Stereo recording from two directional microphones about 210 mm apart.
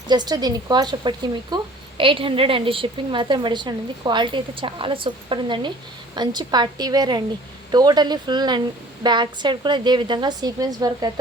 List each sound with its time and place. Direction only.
0.1 s speech: 20° right (ahead or behind)